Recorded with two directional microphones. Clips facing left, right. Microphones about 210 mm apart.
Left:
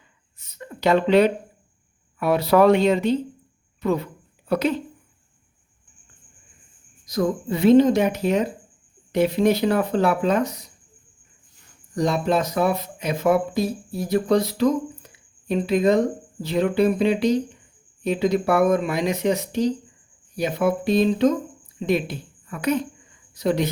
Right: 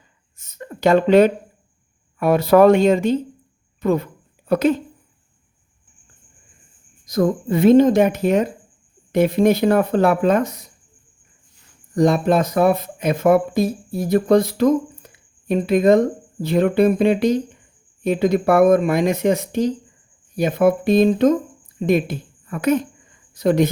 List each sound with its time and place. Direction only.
0.3 s a sound: 45° right (ahead or behind)
2.1 s speech: 50° right (ahead or behind)
7.0 s speech: 50° right (ahead or behind)
11.9 s speech: 50° right (ahead or behind)
15.0 s a sound: 50° right (ahead or behind)
15.4 s a woman's voice: 50° right (ahead or behind)